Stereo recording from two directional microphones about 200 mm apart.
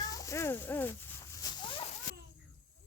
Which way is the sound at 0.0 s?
15° left (ahead or behind).